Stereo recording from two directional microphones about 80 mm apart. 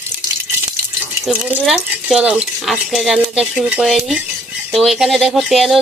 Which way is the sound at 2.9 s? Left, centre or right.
Centre.